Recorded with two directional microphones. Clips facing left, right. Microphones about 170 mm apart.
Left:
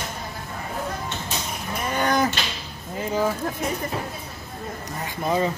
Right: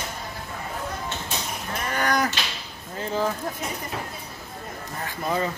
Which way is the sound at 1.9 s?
25° left (ahead or behind).